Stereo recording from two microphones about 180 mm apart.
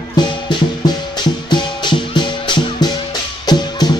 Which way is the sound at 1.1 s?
25° left (ahead or behind).